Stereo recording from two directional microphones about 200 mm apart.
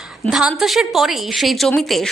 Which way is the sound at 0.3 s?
Centre (ahead or behind).